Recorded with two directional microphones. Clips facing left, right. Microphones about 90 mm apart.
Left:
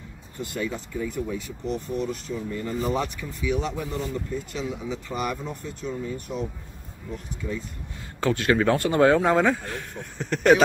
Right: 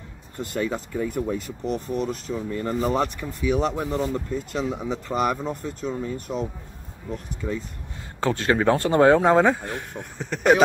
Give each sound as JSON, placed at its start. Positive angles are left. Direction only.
{"t": 0.4, "sound": "speech", "side_deg": -45}
{"t": 5.9, "sound": "speech", "side_deg": -35}
{"t": 7.4, "sound": "speech", "side_deg": -50}
{"t": 8.2, "sound": "speech", "side_deg": -30}
{"t": 10.1, "sound": "speech", "side_deg": -5}